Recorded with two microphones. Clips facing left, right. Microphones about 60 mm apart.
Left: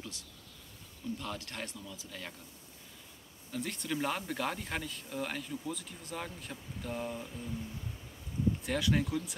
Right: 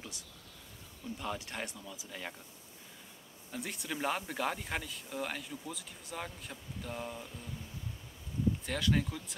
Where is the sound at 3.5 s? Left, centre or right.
Centre.